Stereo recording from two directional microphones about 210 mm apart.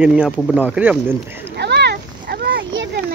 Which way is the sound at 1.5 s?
55° right (ahead or behind).